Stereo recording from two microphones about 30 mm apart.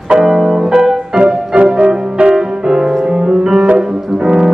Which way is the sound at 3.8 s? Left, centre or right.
Right.